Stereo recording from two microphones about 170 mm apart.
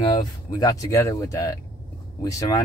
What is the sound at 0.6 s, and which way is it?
Speech, 20° left (ahead or behind).